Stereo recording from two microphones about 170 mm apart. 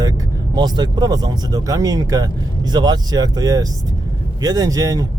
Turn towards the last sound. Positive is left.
turn(degrees=-20)  # may be behind; listen again after turning